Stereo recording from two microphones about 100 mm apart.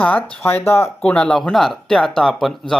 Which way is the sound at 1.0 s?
10° left (ahead or behind).